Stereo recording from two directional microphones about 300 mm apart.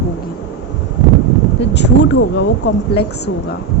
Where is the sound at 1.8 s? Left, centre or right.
Left.